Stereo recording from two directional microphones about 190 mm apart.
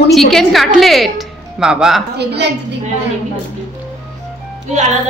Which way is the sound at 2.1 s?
65° right (ahead or behind).